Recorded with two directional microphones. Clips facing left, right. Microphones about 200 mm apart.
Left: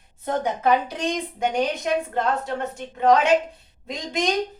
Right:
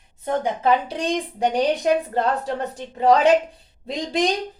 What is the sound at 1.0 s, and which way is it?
Speech, 35° right (ahead or behind).